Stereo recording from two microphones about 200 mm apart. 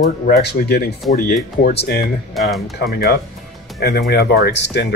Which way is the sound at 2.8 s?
50° left (ahead or behind).